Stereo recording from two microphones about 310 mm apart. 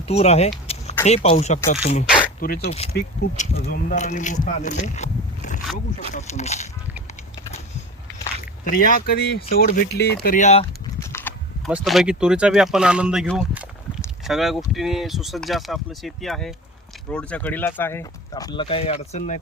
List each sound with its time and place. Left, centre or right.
0.0 s speech: centre
8.6 s speech: left
11.0 s a sound: centre
11.7 s speech: centre; by 19.4 s left